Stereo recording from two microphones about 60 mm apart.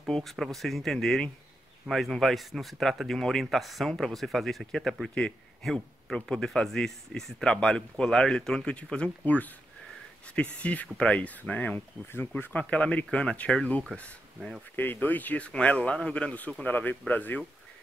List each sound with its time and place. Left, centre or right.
0.1 s speech: centre
14.8 s speech: left